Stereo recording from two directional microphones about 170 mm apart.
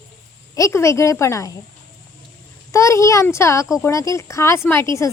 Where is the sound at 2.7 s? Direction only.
15° left (ahead or behind).